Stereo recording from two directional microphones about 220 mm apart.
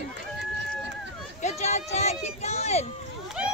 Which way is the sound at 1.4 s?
30° left (ahead or behind).